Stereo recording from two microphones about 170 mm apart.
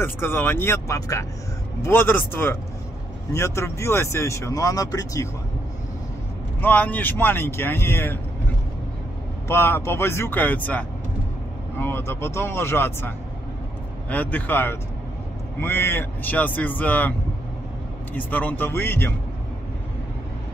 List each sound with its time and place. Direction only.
0.0 s speech: 15° left (ahead or behind)
6.6 s speech: 10° left (ahead or behind)
9.5 s speech: 15° left (ahead or behind)
18.1 s speech: 10° left (ahead or behind)